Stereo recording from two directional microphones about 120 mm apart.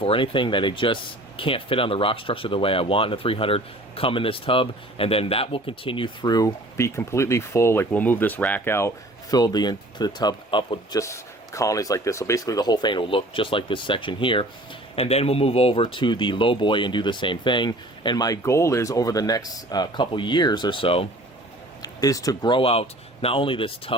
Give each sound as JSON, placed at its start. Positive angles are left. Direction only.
{"t": 0.0, "sound": "speech", "side_deg": 45}
{"t": 6.3, "sound": "speech", "side_deg": 25}
{"t": 9.3, "sound": "speech", "side_deg": 35}
{"t": 10.9, "sound": "speech", "side_deg": 25}
{"t": 14.9, "sound": "speech", "side_deg": 55}
{"t": 15.8, "sound": "speech", "side_deg": 40}
{"t": 21.8, "sound": "speech", "side_deg": 30}